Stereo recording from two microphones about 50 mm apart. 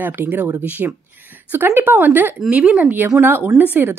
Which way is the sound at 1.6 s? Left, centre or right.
Right.